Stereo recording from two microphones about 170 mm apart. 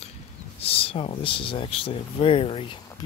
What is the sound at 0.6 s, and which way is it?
Speech, 35° left (ahead or behind).